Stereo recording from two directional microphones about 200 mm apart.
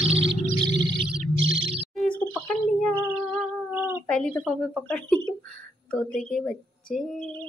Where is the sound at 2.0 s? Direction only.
5° left (ahead or behind).